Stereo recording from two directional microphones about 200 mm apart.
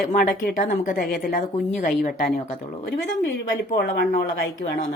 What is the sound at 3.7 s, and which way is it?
Speech, 50° left (ahead or behind).